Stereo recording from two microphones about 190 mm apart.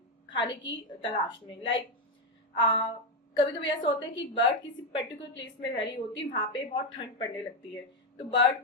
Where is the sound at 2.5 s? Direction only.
25° left (ahead or behind).